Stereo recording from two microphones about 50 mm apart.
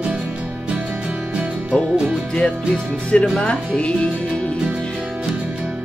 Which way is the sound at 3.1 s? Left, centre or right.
Left.